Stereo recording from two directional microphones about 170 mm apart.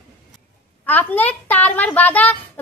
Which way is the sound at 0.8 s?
10° left (ahead or behind).